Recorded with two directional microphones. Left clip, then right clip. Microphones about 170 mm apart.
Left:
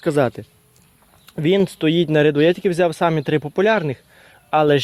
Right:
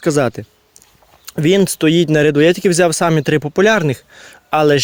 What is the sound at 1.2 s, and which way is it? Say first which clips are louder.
Speech: right 4 dB; 45° right (ahead or behind).